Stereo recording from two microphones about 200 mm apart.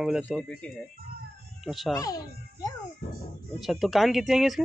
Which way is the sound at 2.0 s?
15° left (ahead or behind).